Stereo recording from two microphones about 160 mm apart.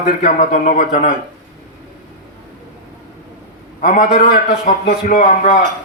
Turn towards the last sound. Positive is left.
turn(degrees=50)  # may be behind; listen again after turning